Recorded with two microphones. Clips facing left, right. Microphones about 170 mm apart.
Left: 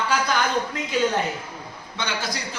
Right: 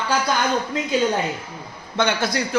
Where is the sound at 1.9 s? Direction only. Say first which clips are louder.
Right 8 dB; 55° right (ahead or behind).